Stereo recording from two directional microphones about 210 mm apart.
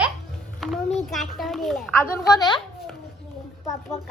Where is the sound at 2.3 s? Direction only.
20° left (ahead or behind).